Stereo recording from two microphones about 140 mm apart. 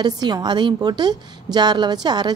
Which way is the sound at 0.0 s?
30° right (ahead or behind).